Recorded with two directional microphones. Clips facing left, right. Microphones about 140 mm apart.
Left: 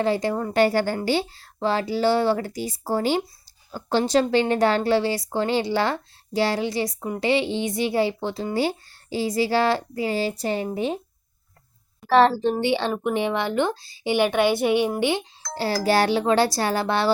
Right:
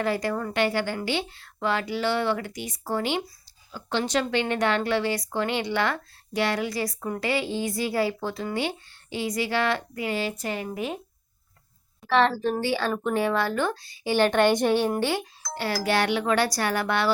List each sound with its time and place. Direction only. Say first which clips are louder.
0.0 s speech: left 4 dB; 25° left (ahead or behind)
0.5 s a woman's voice: left 7 dB; 40° left (ahead or behind)
12.0 s speech: left 5 dB; 35° left (ahead or behind)
14.1 s a woman's voice: even; 10° left (ahead or behind)
15.5 s speech: left 4 dB; 30° left (ahead or behind)